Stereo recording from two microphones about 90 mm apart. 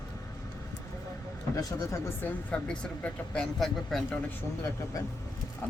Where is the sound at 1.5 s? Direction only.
40° left (ahead or behind).